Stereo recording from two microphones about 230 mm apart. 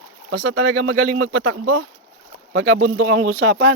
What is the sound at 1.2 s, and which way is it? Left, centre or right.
Speech, right.